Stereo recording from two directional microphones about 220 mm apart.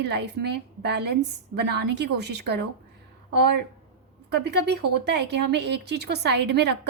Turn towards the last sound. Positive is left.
turn(degrees=-50)  # may be behind; listen again after turning